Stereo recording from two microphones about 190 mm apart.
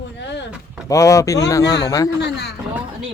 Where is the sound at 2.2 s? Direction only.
60° left (ahead or behind).